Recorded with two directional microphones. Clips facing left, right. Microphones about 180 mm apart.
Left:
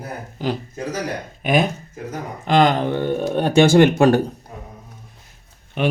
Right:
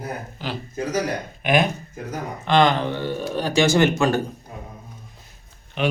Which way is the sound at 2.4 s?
40° left (ahead or behind).